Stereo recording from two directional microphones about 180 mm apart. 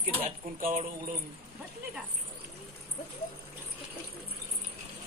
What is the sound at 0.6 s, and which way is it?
Speech, 50° right (ahead or behind).